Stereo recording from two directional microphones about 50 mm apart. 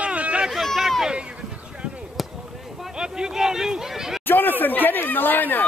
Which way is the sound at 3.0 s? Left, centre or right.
Centre.